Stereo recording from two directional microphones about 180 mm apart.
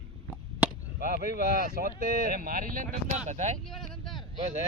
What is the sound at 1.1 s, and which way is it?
Speech, 55° right (ahead or behind).